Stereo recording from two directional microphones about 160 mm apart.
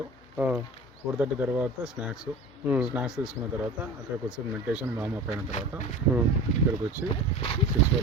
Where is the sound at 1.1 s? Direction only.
10° right (ahead or behind).